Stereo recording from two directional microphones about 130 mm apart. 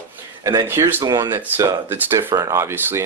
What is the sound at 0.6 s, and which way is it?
Speech, 20° right (ahead or behind).